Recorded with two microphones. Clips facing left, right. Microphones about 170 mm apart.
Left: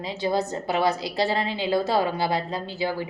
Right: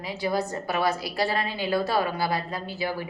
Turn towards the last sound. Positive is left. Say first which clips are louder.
# left 3 dB
turn(degrees=20)  # may be behind; listen again after turning